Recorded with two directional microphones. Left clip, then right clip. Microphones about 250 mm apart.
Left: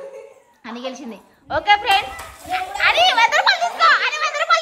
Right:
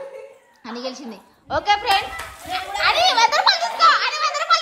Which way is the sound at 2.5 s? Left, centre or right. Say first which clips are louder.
Left 2 dB; centre.